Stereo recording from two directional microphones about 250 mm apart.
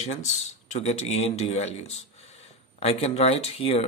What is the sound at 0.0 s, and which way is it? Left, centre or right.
Speech, left.